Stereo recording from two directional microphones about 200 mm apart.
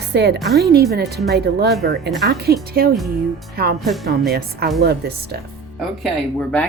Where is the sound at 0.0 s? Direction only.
55° right (ahead or behind).